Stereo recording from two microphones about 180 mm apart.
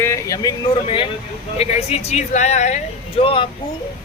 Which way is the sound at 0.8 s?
30° left (ahead or behind).